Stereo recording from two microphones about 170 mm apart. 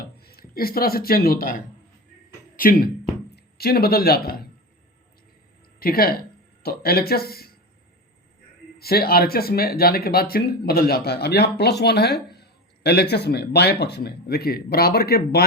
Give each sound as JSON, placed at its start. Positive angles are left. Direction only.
{"t": 0.0, "sound": "speech", "side_deg": 65}
{"t": 5.8, "sound": "speech", "side_deg": 60}
{"t": 8.8, "sound": "speech", "side_deg": 65}